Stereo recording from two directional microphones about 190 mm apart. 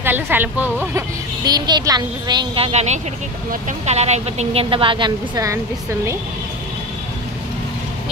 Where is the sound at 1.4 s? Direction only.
20° right (ahead or behind).